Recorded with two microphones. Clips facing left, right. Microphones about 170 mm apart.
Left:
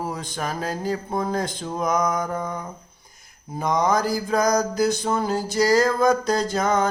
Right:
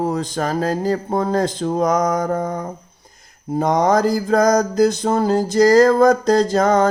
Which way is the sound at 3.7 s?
65° right (ahead or behind).